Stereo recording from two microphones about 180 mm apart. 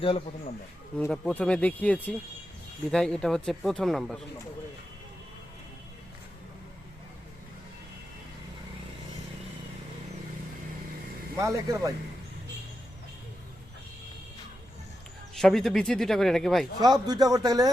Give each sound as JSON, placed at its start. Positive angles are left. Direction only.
{"t": 0.0, "sound": "speech", "side_deg": 30}
{"t": 0.9, "sound": "speech", "side_deg": 5}
{"t": 11.3, "sound": "speech", "side_deg": -15}
{"t": 15.4, "sound": "speech", "side_deg": 0}
{"t": 16.8, "sound": "a man's voice", "side_deg": -20}